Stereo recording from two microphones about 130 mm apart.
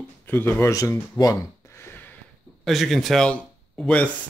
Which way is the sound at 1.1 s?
25° left (ahead or behind).